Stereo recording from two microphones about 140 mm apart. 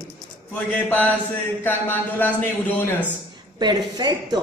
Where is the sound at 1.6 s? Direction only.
15° left (ahead or behind).